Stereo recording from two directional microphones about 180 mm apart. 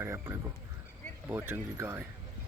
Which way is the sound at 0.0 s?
15° right (ahead or behind).